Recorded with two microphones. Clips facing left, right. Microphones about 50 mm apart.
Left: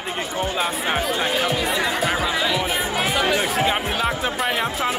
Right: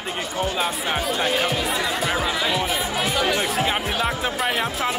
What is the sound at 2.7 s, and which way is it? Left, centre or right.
Music, left.